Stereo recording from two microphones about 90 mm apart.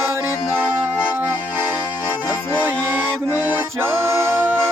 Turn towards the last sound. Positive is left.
turn(degrees=-20)  # may be behind; listen again after turning